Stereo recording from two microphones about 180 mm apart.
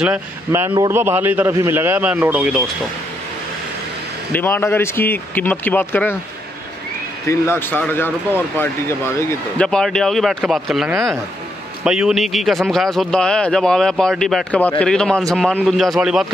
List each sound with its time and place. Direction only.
0.0 s a man's voice: 10° right (ahead or behind)
4.3 s speech: 10° left (ahead or behind)
7.2 s speech: 15° left (ahead or behind); by 16.3 s centre (ahead or behind)